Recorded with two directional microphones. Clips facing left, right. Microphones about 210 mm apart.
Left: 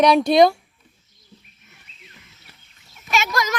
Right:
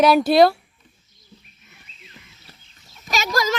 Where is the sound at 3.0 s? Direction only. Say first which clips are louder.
Right 1 dB; 35° right (ahead or behind).